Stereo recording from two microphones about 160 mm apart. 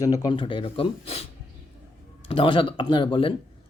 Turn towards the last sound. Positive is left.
turn(degrees=35)  # may be behind; listen again after turning